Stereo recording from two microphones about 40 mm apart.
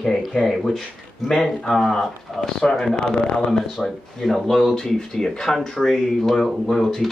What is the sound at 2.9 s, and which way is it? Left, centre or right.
Speech, left.